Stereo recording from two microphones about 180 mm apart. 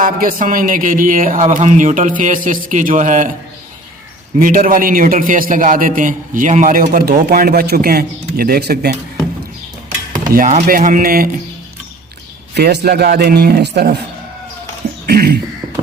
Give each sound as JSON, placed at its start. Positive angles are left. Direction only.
{"t": 0.0, "sound": "a man's voice", "side_deg": -50}
{"t": 4.4, "sound": "a man's voice", "side_deg": -50}
{"t": 10.7, "sound": "a man's voice", "side_deg": -50}
{"t": 12.5, "sound": "speech", "side_deg": -65}
{"t": 15.0, "sound": "cough", "side_deg": -60}